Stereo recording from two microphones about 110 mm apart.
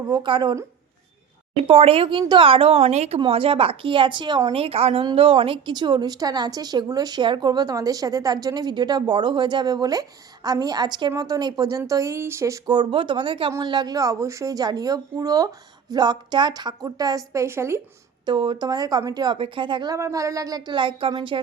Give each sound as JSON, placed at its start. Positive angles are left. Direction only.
{"t": 0.1, "sound": "speech", "side_deg": -45}
{"t": 1.5, "sound": "speech", "side_deg": -60}
{"t": 3.2, "sound": "speech", "side_deg": -55}
{"t": 4.5, "sound": "a woman's voice", "side_deg": -60}
{"t": 12.6, "sound": "a woman's voice", "side_deg": -40}
{"t": 18.3, "sound": "speech", "side_deg": -45}
{"t": 19.9, "sound": "a woman's voice", "side_deg": -30}